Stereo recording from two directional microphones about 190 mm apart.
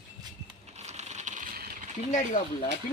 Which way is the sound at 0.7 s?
35° right (ahead or behind).